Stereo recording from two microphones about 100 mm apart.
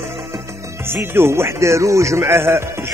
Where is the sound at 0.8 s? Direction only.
25° right (ahead or behind).